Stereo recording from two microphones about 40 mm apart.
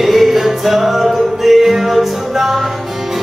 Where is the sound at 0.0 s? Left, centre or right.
Centre.